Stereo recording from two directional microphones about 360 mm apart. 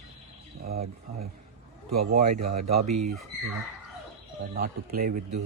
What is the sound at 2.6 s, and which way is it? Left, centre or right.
Speech, right.